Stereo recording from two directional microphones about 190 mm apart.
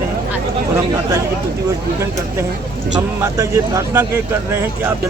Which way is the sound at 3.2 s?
15° right (ahead or behind).